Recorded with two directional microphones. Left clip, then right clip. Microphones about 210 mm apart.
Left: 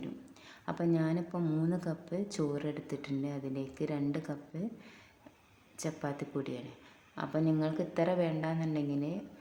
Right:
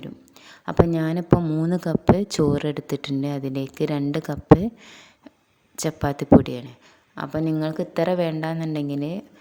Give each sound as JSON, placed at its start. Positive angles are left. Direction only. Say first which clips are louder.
{"t": 0.0, "sound": "a woman's voice", "louder": "right 5 dB", "side_deg": -40}